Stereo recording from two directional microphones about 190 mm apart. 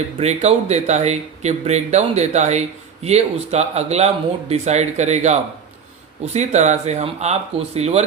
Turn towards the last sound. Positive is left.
turn(degrees=-35)  # may be behind; listen again after turning